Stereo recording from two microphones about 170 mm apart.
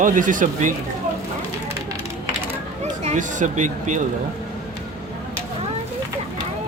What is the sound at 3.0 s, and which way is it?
Speech, 45° right (ahead or behind).